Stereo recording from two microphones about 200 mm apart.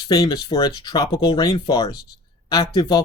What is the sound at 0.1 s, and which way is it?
Speech, 20° left (ahead or behind).